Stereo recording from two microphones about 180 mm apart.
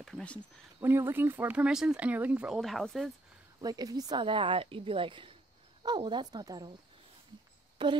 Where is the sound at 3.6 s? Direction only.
20° right (ahead or behind).